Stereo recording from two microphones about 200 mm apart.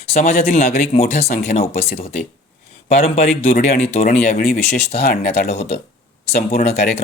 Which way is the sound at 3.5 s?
45° left (ahead or behind).